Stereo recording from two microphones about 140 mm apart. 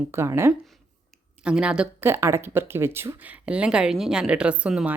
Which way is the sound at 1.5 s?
5° right (ahead or behind).